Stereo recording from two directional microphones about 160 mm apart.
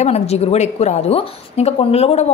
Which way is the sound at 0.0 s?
40° left (ahead or behind).